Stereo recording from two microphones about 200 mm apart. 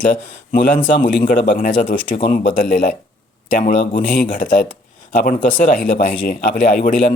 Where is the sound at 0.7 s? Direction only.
40° left (ahead or behind).